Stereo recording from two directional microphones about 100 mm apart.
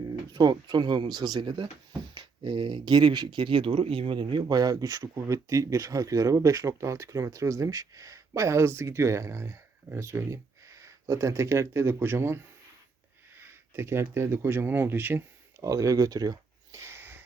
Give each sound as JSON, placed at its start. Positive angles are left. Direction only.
{"t": 0.3, "sound": "speech", "side_deg": -45}
{"t": 15.6, "sound": "speech", "side_deg": -35}
{"t": 16.8, "sound": "a sound", "side_deg": -25}